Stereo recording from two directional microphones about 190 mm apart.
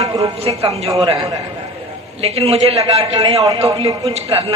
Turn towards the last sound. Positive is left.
turn(degrees=-30)  # may be behind; listen again after turning